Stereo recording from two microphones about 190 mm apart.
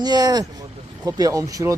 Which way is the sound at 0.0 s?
20° right (ahead or behind).